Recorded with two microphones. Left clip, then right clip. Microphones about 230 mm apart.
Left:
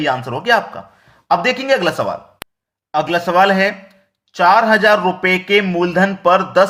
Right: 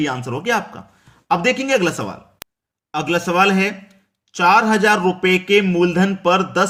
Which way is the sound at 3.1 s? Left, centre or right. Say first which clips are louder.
Left 2 dB; centre.